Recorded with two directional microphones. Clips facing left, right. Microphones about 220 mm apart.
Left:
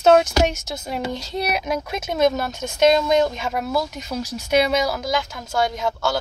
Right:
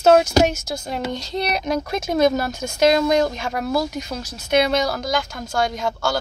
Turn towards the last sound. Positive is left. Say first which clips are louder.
# even
turn(degrees=5)  # may be behind; listen again after turning